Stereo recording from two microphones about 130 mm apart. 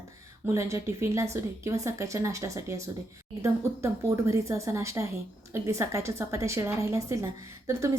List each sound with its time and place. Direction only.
0.4 s a woman's voice: 20° right (ahead or behind)